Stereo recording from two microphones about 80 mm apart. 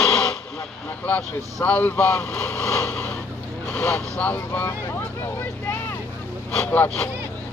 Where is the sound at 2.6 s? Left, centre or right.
Left.